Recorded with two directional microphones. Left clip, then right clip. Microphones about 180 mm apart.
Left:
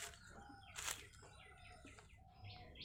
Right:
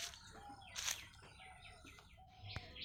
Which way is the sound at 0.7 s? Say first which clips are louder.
Right 4 dB; 40° left (ahead or behind).